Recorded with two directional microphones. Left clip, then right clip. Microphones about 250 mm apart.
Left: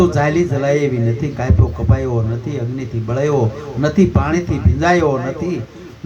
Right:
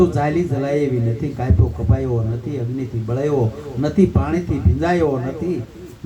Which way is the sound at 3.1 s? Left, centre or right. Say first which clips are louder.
Left 3 dB; left.